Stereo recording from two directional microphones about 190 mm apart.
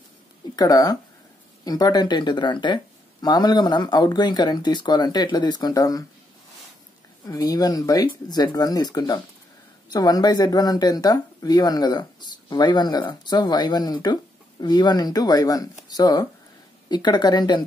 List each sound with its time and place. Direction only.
0.6 s speech: 20° left (ahead or behind)
7.2 s speech: 20° left (ahead or behind)